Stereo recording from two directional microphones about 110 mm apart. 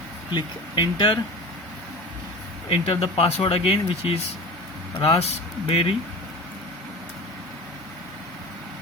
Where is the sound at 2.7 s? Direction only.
60° left (ahead or behind).